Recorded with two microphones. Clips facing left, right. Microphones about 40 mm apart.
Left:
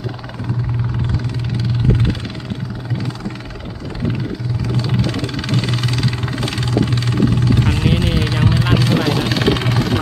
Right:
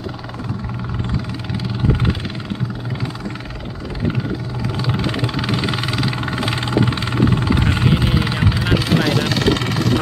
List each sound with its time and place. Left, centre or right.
1.9 s music: centre
4.6 s vehicle: centre
7.9 s vehicle: centre